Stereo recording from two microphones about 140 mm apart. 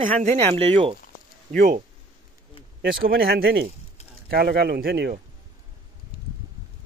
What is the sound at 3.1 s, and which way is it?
Speech, 90° right.